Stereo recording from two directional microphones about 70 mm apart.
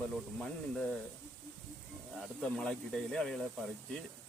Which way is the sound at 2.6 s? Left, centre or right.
Centre.